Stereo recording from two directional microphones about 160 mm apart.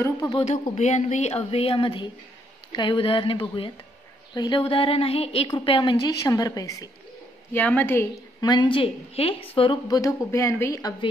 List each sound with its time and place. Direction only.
0.0 s a woman's voice: 20° left (ahead or behind)
0.4 s a woman's voice: 45° left (ahead or behind); by 8.1 s 15° left (ahead or behind)
8.4 s a woman's voice: 25° left (ahead or behind)